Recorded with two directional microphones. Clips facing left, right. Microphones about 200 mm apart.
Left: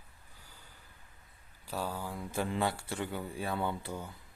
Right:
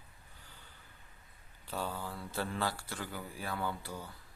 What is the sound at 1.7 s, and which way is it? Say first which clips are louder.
Speech: left 2 dB; 10° left (ahead or behind).